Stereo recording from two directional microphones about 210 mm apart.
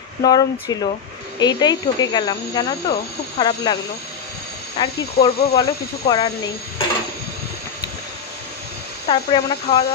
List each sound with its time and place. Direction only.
0.2 s speech: 20° left (ahead or behind)
4.8 s speech: 20° left (ahead or behind)
9.0 s speech: 25° left (ahead or behind)